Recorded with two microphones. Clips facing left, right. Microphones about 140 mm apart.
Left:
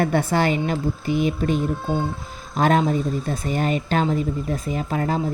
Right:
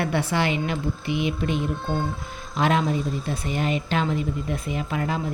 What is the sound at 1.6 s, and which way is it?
Speech, 5° left (ahead or behind).